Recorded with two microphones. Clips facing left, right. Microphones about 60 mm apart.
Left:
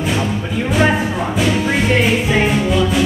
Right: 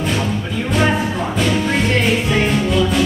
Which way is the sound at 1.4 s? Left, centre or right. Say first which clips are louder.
Left 1 dB; centre.